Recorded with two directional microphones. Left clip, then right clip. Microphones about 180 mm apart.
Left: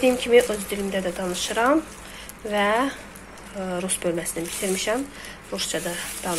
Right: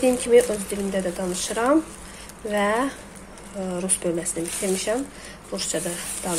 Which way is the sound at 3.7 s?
5° right (ahead or behind).